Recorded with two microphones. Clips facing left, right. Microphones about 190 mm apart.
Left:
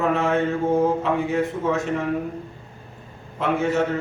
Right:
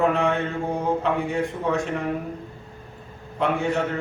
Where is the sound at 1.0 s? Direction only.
Centre (ahead or behind).